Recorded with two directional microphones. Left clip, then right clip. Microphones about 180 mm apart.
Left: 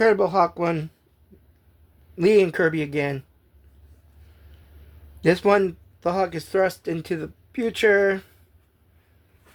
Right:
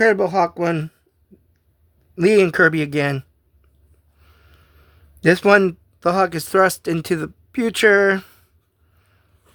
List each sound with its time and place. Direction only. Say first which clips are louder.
0.0 s speech: right 2 dB; 40° right (ahead or behind)
2.1 s speech: right 4 dB; 40° right (ahead or behind)
5.2 s speech: right 5 dB; 45° right (ahead or behind)